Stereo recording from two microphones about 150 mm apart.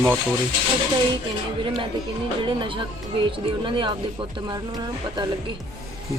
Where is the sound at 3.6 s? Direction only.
35° right (ahead or behind).